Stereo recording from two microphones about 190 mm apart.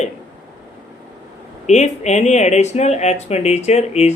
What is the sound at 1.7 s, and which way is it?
Speech, 35° left (ahead or behind).